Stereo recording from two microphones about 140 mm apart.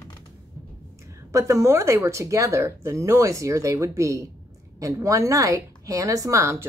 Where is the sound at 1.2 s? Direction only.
20° right (ahead or behind).